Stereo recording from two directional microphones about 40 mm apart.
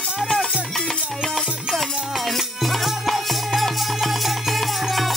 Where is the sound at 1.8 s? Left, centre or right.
Centre.